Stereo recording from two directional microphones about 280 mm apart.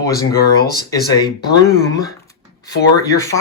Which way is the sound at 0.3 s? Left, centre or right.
Left.